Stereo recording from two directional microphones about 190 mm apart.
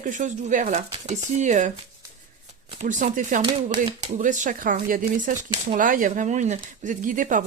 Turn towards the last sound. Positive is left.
turn(degrees=-45)  # may be behind; listen again after turning